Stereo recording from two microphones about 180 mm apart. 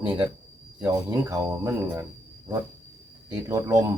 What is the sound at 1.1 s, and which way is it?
Speech, 20° right (ahead or behind).